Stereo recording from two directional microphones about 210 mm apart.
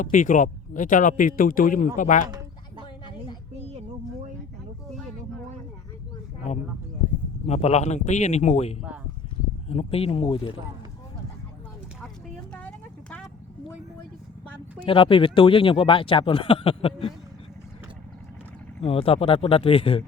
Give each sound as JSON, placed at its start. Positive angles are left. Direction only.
{"t": 0.0, "sound": "a man's voice", "side_deg": 40}
{"t": 3.7, "sound": "a sound", "side_deg": -30}
{"t": 7.4, "sound": "a man's voice", "side_deg": 30}
{"t": 12.5, "sound": "vehicle", "side_deg": 5}
{"t": 14.8, "sound": "speech", "side_deg": 25}
{"t": 18.9, "sound": "speech", "side_deg": 25}